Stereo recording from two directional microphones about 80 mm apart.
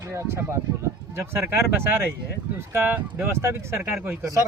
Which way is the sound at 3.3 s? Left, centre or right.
Right.